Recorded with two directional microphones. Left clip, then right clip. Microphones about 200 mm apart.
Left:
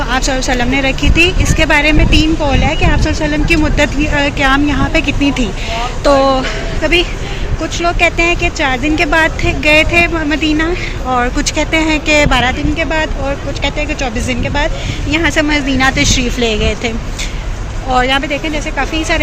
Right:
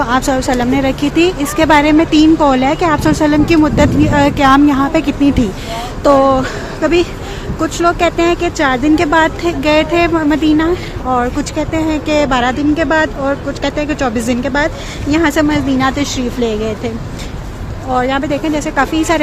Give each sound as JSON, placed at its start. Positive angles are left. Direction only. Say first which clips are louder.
{"t": 0.1, "sound": "speech", "louder": "right 1 dB", "side_deg": -25}
{"t": 12.5, "sound": "a woman's voice", "louder": "right 2 dB", "side_deg": -35}
{"t": 17.9, "sound": "speech", "louder": "left 2 dB", "side_deg": -15}